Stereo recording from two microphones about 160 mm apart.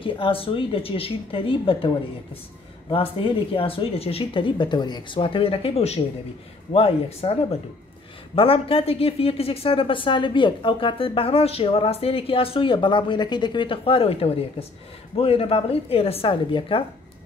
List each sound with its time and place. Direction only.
0.0 s speech: 35° left (ahead or behind)
2.9 s speech: 35° left (ahead or behind)
8.4 s speech: 35° left (ahead or behind)